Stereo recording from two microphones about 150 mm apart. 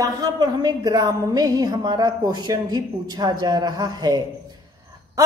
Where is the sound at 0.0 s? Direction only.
25° right (ahead or behind).